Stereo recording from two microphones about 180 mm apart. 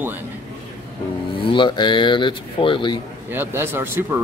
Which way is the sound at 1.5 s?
25° left (ahead or behind).